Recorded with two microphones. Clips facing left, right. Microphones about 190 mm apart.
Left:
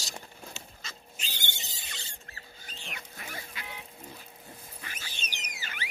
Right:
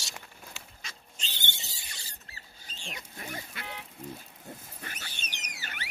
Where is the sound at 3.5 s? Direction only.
60° right (ahead or behind).